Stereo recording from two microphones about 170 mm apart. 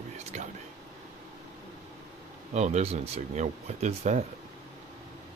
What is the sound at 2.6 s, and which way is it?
Speech, 40° right (ahead or behind).